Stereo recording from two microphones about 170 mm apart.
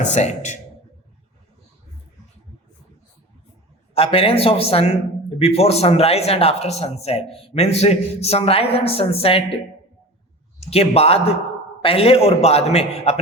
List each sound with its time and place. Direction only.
0.0 s a man's voice: 45° left (ahead or behind)
3.9 s a man's voice: 35° left (ahead or behind)
10.6 s a man's voice: 35° left (ahead or behind)